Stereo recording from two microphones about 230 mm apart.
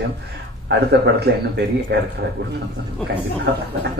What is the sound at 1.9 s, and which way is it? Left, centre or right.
Speech, right.